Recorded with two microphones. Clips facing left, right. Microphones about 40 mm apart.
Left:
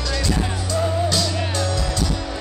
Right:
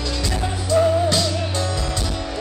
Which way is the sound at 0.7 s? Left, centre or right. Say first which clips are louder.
Right 5 dB; centre.